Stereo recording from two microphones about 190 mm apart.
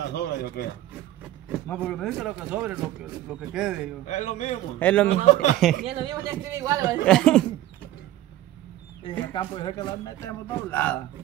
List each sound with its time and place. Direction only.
0.1 s speech: 60° left (ahead or behind)
1.7 s speech: 5° left (ahead or behind)
4.0 s a man's voice: 40° left (ahead or behind)
4.7 s a man's voice: 10° left (ahead or behind)
5.1 s a man's voice: 35° left (ahead or behind)
5.6 s speech: centre (ahead or behind)
5.9 s speech: 25° right (ahead or behind)
7.1 s speech: 5° left (ahead or behind)
9.3 s a man's voice: 25° left (ahead or behind)